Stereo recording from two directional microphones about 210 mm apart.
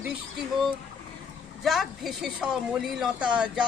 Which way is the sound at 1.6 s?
Centre (ahead or behind).